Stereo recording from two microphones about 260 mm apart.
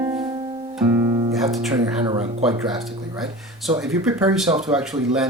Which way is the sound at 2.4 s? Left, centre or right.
Centre.